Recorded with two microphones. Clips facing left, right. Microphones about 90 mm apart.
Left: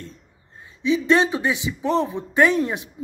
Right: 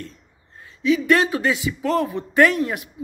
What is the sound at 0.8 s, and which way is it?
Speech, 20° left (ahead or behind).